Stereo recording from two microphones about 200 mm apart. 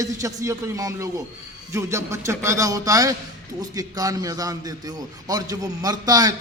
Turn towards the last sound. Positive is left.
turn(degrees=-20)  # may be behind; listen again after turning